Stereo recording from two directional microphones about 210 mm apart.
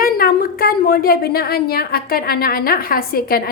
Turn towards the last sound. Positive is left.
turn(degrees=45)  # may be behind; listen again after turning